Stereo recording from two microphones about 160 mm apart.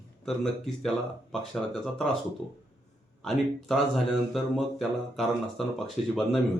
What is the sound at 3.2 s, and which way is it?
Speech, centre (ahead or behind).